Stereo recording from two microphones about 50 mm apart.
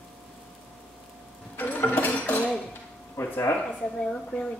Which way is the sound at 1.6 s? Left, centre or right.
Left.